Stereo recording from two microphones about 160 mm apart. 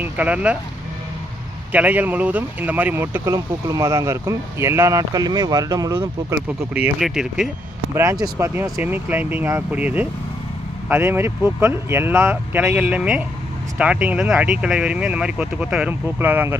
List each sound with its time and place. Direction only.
0.0 s speech: 10° right (ahead or behind)
1.7 s speech: 10° right (ahead or behind)